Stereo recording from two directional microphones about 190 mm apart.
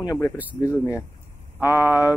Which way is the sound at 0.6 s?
15° left (ahead or behind).